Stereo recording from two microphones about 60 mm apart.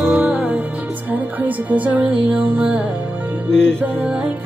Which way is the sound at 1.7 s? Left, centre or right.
Right.